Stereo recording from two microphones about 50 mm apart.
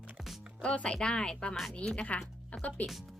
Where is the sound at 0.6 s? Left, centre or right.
Left.